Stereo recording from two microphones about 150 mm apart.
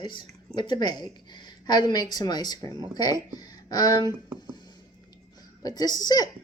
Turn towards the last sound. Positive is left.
turn(degrees=25)  # may be behind; listen again after turning